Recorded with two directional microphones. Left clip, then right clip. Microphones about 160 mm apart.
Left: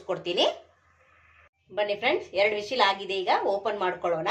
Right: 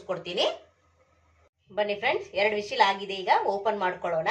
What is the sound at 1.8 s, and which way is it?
A woman's voice, 45° left (ahead or behind).